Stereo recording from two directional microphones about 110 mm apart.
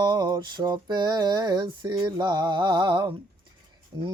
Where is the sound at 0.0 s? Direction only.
40° right (ahead or behind).